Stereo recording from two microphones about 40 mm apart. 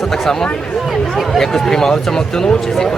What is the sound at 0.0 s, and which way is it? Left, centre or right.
Speech, centre.